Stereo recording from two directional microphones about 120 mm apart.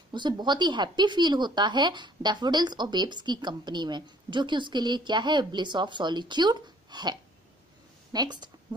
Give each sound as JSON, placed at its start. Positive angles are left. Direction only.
{"t": 0.1, "sound": "a woman's voice", "side_deg": -40}